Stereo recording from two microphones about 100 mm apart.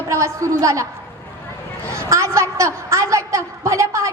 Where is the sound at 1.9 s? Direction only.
30° right (ahead or behind).